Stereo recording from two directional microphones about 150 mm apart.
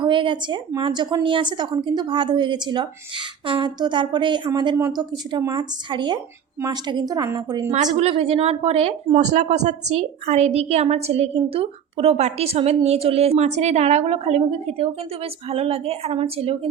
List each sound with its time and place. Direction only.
0.0 s a woman's voice: 35° right (ahead or behind)
7.9 s a woman's voice: 40° right (ahead or behind)